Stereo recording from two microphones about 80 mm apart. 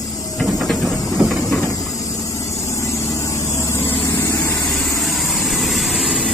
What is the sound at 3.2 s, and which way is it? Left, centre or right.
Vehicle, left.